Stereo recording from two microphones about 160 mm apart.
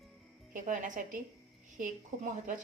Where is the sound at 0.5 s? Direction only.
50° right (ahead or behind).